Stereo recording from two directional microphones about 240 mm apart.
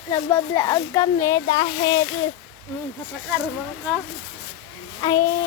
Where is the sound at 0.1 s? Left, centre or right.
Centre.